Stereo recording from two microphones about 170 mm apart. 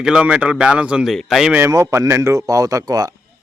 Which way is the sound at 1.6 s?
20° right (ahead or behind).